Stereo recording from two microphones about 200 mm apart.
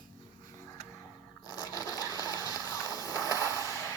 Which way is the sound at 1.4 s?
20° left (ahead or behind).